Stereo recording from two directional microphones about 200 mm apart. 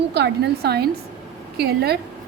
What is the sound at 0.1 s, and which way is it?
A woman's voice, 55° right (ahead or behind).